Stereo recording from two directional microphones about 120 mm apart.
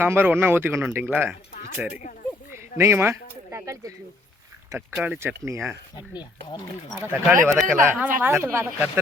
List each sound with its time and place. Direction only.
0.0 s speech: 20° right (ahead or behind)
6.0 s speech: 35° left (ahead or behind)
7.0 s speech: 15° right (ahead or behind)